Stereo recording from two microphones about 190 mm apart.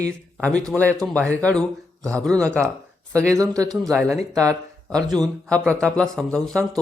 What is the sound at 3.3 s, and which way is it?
Speech, 15° right (ahead or behind).